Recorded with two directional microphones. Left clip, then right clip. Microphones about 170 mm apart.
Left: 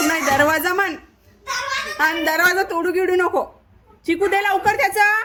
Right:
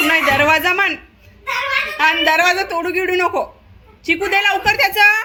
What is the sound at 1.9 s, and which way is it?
A man's voice, 20° left (ahead or behind).